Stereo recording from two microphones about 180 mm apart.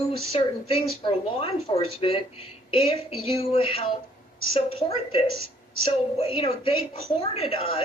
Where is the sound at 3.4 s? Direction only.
30° left (ahead or behind).